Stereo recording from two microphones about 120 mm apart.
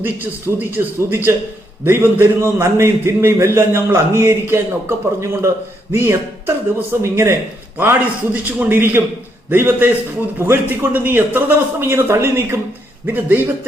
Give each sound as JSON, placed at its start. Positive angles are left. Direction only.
{"t": 0.0, "sound": "a man's voice", "side_deg": -15}